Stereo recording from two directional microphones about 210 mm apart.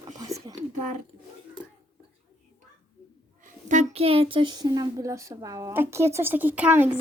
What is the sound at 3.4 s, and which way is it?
Speech, 35° right (ahead or behind).